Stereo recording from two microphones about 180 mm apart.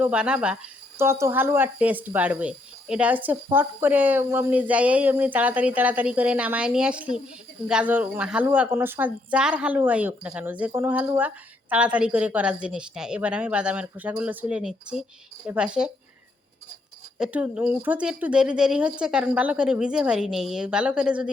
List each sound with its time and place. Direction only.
0.0 s a woman's voice: 5° right (ahead or behind)
17.2 s a woman's voice: 5° right (ahead or behind)